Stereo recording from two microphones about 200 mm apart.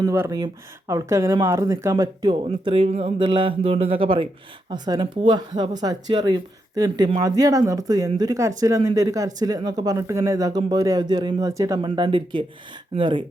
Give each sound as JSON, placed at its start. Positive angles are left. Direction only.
{"t": 0.0, "sound": "speech", "side_deg": -15}